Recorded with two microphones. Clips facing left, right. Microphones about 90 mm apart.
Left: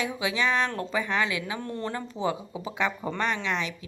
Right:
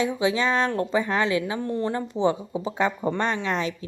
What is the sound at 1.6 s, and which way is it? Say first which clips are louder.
Speech: right 6 dB; 20° right (ahead or behind).